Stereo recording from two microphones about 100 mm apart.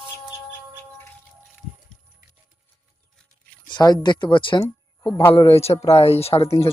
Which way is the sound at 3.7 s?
45° left (ahead or behind).